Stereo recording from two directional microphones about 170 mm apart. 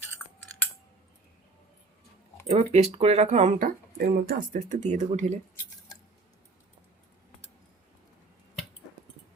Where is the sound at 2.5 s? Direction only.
40° right (ahead or behind); by 4.6 s 55° right (ahead or behind).